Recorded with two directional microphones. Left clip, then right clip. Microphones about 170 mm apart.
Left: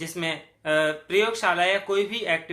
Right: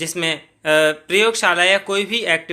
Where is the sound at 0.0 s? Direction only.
45° right (ahead or behind).